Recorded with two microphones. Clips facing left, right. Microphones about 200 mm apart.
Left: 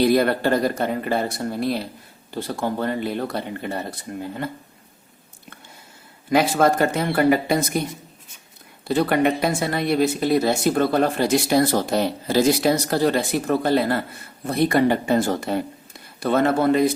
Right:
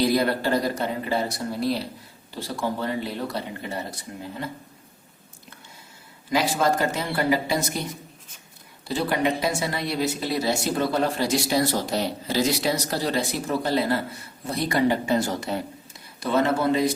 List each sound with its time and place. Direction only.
0.0 s speech: 60° left (ahead or behind)
6.3 s speech: 55° left (ahead or behind)
8.9 s speech: 60° left (ahead or behind)